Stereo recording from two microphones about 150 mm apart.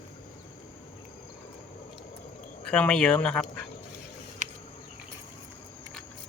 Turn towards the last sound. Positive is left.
turn(degrees=-60)  # may be behind; listen again after turning